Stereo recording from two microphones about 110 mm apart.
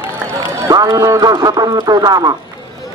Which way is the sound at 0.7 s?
35° right (ahead or behind).